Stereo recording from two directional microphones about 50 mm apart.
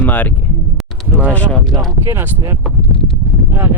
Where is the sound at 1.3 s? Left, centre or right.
Left.